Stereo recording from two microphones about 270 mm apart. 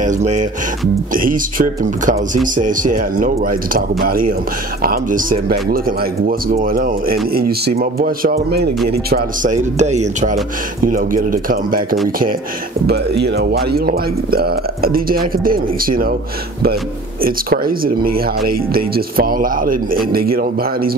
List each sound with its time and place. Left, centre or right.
0.0 s speech: right
13.2 s speech: right
17.2 s speech: right